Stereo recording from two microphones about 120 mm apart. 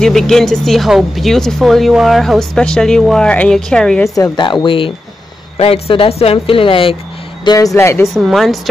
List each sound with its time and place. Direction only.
0.0 s speech: 5° left (ahead or behind)
4.1 s speech: 35° left (ahead or behind)
7.4 s speech: 30° left (ahead or behind)
8.2 s speech: centre (ahead or behind)